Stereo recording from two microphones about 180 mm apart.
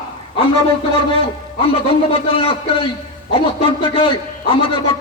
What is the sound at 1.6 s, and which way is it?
A man's voice, 30° left (ahead or behind).